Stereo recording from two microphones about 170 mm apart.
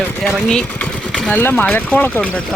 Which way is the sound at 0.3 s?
5° left (ahead or behind).